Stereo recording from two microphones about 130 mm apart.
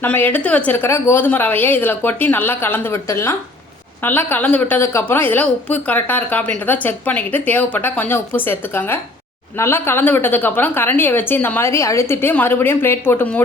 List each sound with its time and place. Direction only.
0.0 s a woman's voice: 15° left (ahead or behind)